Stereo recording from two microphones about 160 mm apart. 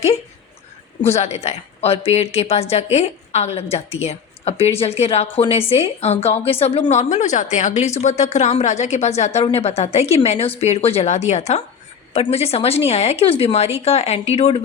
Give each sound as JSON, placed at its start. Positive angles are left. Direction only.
{"t": 1.0, "sound": "a woman's voice", "side_deg": 45}